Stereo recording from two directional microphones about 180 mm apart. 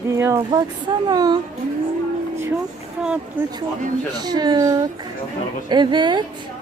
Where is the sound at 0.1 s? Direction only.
15° right (ahead or behind).